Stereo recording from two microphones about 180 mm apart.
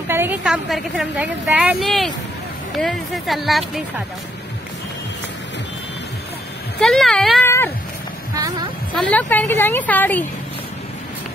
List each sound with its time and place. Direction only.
0.1 s a woman's voice: 10° right (ahead or behind)
6.8 s a woman's voice: 5° left (ahead or behind)
7.4 s cat: 15° left (ahead or behind)
8.4 s speech: 20° right (ahead or behind)
8.9 s a woman's voice: 10° left (ahead or behind)